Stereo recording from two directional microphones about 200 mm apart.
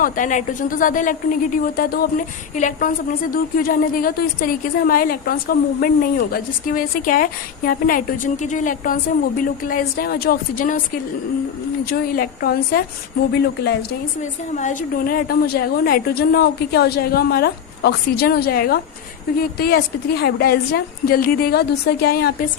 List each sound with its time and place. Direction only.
0.0 s a woman's voice: 40° left (ahead or behind)
14.5 s a woman's voice: 40° left (ahead or behind)